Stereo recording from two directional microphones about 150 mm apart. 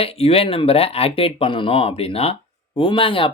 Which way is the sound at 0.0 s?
40° left (ahead or behind).